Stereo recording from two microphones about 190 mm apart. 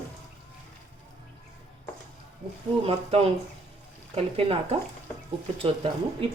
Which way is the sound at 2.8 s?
30° right (ahead or behind).